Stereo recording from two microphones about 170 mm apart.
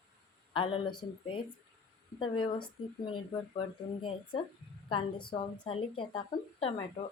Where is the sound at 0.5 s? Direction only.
30° left (ahead or behind).